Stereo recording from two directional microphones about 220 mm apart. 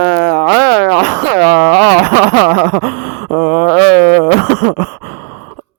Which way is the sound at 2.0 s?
40° right (ahead or behind).